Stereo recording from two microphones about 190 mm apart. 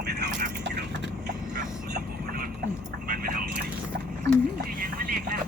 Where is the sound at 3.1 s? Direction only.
50° right (ahead or behind).